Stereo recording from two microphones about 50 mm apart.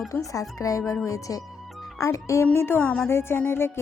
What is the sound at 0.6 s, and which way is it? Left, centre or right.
Speech, left.